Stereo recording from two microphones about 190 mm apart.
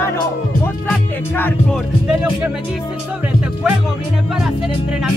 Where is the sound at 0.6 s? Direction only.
10° left (ahead or behind).